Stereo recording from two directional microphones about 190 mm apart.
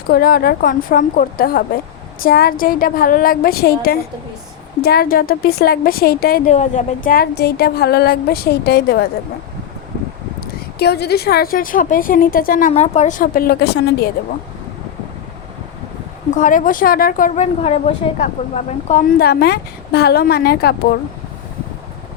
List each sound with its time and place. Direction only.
0.1 s a woman's voice: 50° left (ahead or behind)
6.5 s speech: 40° left (ahead or behind); by 9.0 s 55° left (ahead or behind)
10.4 s a woman's voice: 60° left (ahead or behind)
16.3 s a woman's voice: 45° left (ahead or behind)
19.2 s speech: 55° left (ahead or behind)